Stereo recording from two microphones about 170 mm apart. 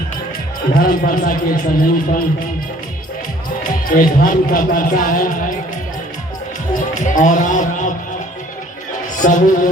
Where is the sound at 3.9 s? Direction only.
50° left (ahead or behind).